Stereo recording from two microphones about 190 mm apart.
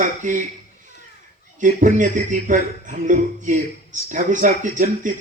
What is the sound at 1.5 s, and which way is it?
Speech, 40° right (ahead or behind).